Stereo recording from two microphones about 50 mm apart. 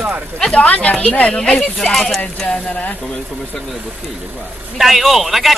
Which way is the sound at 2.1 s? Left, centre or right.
Left.